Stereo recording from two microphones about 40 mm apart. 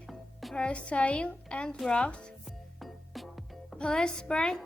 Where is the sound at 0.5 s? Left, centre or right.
Left.